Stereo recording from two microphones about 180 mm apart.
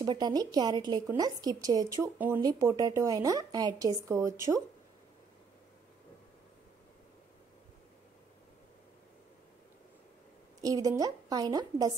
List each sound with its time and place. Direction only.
0.0 s a woman's voice: 25° right (ahead or behind)
10.6 s a woman's voice: 20° right (ahead or behind)